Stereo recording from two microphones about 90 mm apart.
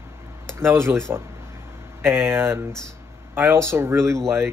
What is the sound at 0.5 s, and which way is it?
Speech, 30° right (ahead or behind).